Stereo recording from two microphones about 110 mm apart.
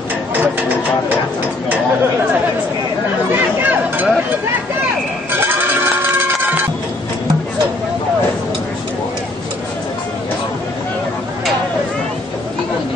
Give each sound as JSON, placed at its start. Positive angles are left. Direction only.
{"t": 3.3, "sound": "chatter", "side_deg": -15}